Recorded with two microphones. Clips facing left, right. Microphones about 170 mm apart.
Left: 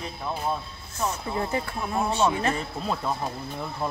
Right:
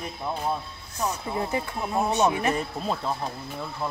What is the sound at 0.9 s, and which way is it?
Speech, 15° right (ahead or behind).